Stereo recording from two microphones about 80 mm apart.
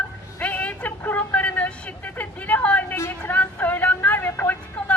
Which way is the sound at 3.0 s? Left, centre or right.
Left.